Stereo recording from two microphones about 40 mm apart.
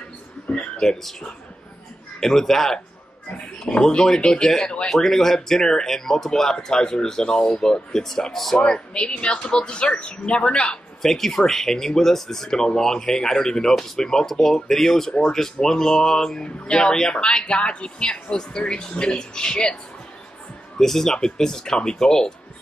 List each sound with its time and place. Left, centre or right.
0.5 s a sound: centre
2.1 s speech: centre
8.5 s speech: centre
11.0 s speech: centre; by 19.8 s left
20.7 s speech: centre